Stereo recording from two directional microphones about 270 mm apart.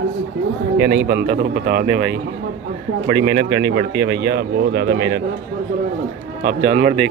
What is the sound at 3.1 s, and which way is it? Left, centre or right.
A man's voice, right.